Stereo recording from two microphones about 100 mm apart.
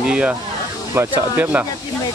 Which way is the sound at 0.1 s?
15° right (ahead or behind).